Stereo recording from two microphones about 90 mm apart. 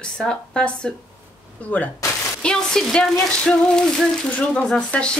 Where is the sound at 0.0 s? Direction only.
10° left (ahead or behind).